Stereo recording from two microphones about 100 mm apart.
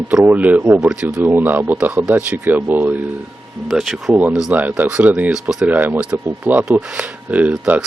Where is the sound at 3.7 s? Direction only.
Centre (ahead or behind).